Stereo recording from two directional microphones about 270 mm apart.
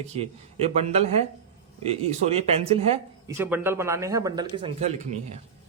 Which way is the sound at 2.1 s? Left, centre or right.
Right.